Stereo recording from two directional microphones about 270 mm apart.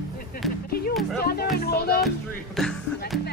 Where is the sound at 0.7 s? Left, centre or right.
Left.